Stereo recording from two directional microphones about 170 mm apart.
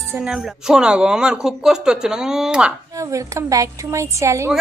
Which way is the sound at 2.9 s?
20° right (ahead or behind).